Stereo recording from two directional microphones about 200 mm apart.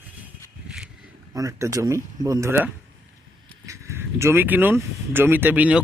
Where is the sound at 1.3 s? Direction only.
15° right (ahead or behind).